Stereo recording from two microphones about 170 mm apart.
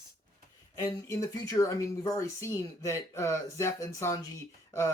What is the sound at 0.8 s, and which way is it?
Speech, 20° left (ahead or behind).